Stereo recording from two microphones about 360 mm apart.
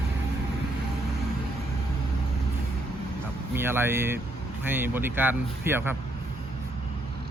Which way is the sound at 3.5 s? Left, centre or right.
Centre.